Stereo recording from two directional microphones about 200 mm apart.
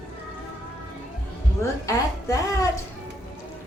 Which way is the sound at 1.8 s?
15° left (ahead or behind).